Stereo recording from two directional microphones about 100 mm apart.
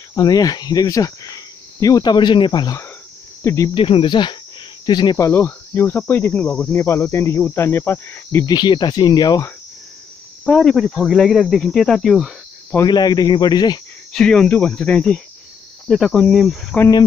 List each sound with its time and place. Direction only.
0.1 s speech: 40° left (ahead or behind)
3.4 s speech: 30° left (ahead or behind)
3.7 s speech: 65° left (ahead or behind); by 5.1 s 45° left (ahead or behind)
5.3 s cricket: 25° left (ahead or behind)
8.5 s speech: 45° left (ahead or behind)
10.4 s speech: 5° left (ahead or behind)
12.8 s speech: 45° left (ahead or behind)
14.1 s speech: 10° left (ahead or behind)